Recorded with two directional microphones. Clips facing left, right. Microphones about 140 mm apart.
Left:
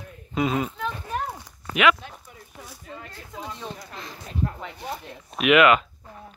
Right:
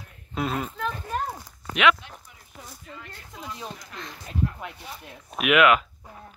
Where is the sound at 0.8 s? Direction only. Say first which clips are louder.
Even; 5° right (ahead or behind).